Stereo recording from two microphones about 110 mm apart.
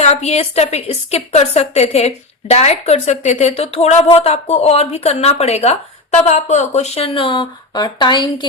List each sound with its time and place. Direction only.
0.0 s a woman's voice: 80° left
7.0 s a woman's voice: 55° left (ahead or behind)